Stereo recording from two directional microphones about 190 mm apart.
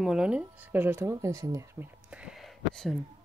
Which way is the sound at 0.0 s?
5° right (ahead or behind).